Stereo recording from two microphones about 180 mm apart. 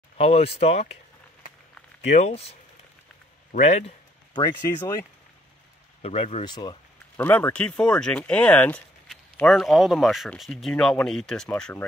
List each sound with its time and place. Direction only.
0.2 s speech: 35° left (ahead or behind)
2.0 s speech: 40° left (ahead or behind)
3.5 s speech: 40° left (ahead or behind)
4.3 s speech: 20° left (ahead or behind)
6.0 s speech: 35° left (ahead or behind)
7.2 s speech: 10° left (ahead or behind)